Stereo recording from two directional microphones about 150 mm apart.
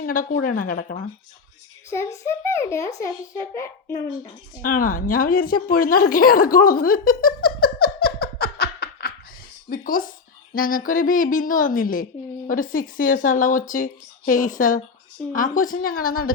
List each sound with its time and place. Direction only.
0.0 s a woman's voice: 70° left (ahead or behind)
2.2 s a child's voice: 15° left (ahead or behind)
4.6 s a woman's voice: 70° left (ahead or behind); by 9.1 s 90° left
9.6 s a woman's voice: 70° left (ahead or behind)